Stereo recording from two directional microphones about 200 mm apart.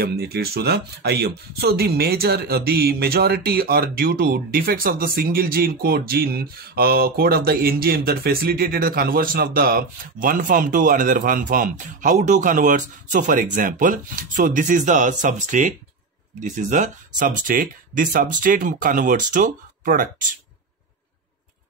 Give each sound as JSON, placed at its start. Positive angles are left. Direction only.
{"t": 0.0, "sound": "speech", "side_deg": -50}